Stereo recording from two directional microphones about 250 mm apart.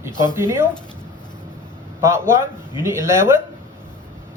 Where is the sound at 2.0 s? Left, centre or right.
Centre.